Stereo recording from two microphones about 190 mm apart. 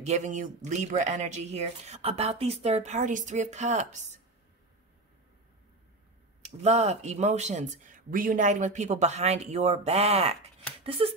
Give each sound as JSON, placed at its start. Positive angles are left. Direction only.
{"t": 0.0, "sound": "speech", "side_deg": -40}
{"t": 6.4, "sound": "speech", "side_deg": -35}